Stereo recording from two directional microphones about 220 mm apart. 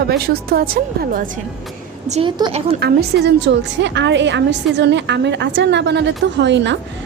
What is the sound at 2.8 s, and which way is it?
A woman's voice, 50° right (ahead or behind).